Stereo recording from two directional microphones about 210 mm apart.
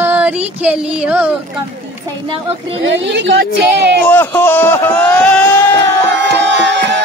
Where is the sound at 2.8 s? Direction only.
55° right (ahead or behind).